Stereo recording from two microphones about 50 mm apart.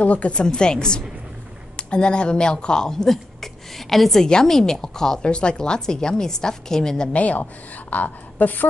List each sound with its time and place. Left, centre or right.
0.0 s speech: left; by 7.1 s centre
7.1 s a woman's voice: left